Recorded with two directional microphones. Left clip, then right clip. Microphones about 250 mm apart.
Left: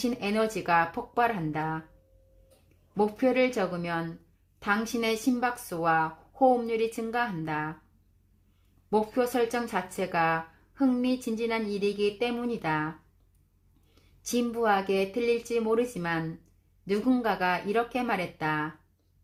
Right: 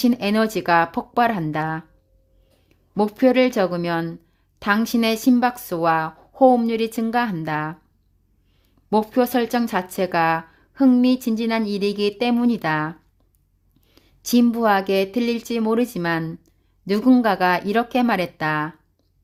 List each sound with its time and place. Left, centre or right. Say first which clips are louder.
0.0 s a woman's voice: right 8 dB; right
2.9 s a woman's voice: right 8 dB; right
8.9 s a woman's voice: right 7 dB; right
13.9 s a woman's voice: right 10 dB; right